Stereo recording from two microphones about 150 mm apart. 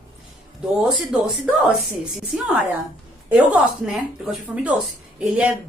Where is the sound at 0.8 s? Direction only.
Centre (ahead or behind).